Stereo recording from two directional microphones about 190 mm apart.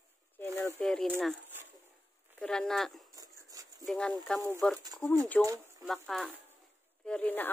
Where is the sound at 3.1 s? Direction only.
20° right (ahead or behind).